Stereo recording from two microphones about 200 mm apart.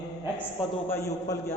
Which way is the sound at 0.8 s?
10° left (ahead or behind).